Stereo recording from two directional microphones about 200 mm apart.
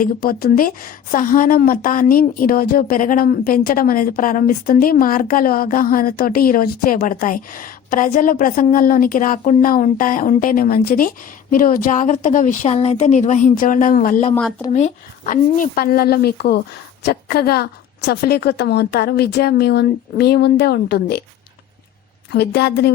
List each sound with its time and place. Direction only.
0.0 s a woman's voice: 45° left (ahead or behind)
22.3 s a woman's voice: 55° left (ahead or behind)